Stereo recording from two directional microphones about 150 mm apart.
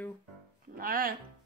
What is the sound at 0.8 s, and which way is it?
Speech, 75° right (ahead or behind).